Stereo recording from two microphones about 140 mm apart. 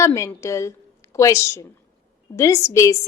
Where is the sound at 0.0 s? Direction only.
20° left (ahead or behind).